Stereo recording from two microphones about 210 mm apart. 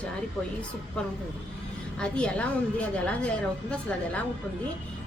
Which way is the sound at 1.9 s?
5° left (ahead or behind).